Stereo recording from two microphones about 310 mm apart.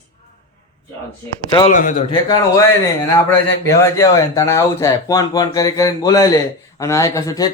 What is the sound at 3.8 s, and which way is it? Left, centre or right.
Speech, centre.